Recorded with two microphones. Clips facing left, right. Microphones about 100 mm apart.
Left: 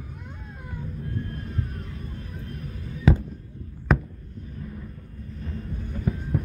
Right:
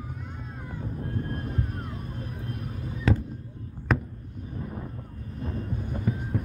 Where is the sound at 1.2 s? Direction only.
35° right (ahead or behind).